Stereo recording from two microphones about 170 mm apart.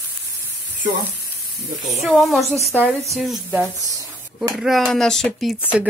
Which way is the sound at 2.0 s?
Centre (ahead or behind).